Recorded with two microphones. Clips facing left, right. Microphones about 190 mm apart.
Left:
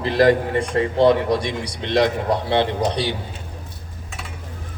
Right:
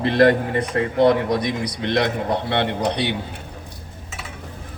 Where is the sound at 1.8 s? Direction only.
60° right (ahead or behind).